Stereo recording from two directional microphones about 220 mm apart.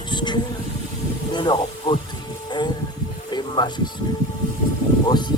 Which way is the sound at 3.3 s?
20° left (ahead or behind).